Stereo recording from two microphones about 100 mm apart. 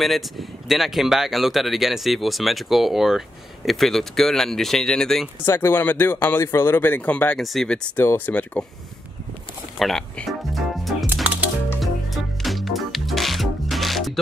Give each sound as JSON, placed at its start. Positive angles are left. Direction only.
{"t": 0.0, "sound": "speech", "side_deg": 0}
{"t": 5.4, "sound": "speech", "side_deg": 25}
{"t": 7.9, "sound": "speech", "side_deg": 20}
{"t": 9.8, "sound": "music", "side_deg": 5}